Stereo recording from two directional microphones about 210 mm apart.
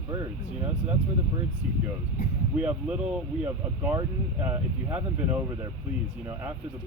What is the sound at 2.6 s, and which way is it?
Speech, 5° right (ahead or behind).